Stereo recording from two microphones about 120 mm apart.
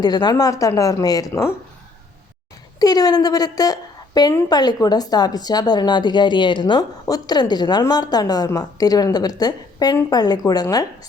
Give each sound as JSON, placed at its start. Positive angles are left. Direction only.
{"t": 0.0, "sound": "speech", "side_deg": 35}
{"t": 2.7, "sound": "a woman's voice", "side_deg": 30}